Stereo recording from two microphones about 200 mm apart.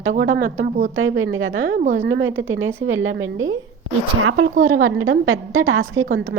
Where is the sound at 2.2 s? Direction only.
85° right.